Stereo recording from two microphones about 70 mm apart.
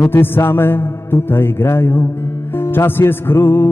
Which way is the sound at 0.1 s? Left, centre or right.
Left.